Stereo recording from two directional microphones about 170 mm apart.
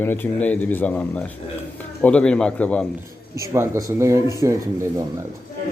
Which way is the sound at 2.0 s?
5° left (ahead or behind).